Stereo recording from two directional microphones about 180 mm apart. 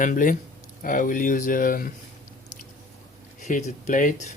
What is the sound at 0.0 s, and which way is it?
Speech, 45° left (ahead or behind).